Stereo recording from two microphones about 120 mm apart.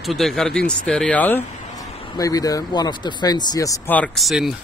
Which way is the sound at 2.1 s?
30° left (ahead or behind).